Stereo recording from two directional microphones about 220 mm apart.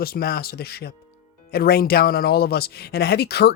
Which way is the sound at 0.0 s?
45° left (ahead or behind).